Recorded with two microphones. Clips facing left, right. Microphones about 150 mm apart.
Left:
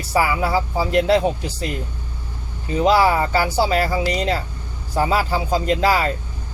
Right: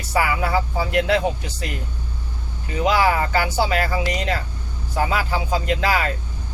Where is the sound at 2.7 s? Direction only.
35° left (ahead or behind).